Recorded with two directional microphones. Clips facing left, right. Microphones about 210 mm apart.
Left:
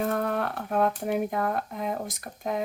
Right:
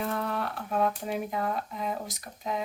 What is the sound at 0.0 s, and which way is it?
Speech, 50° left (ahead or behind).